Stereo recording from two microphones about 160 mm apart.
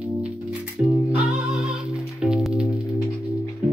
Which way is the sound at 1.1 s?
5° right (ahead or behind).